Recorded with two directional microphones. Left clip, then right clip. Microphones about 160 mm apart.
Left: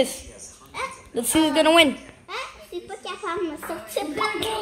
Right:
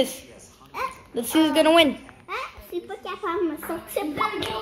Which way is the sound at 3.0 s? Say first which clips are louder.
Right 1 dB; 60° right (ahead or behind).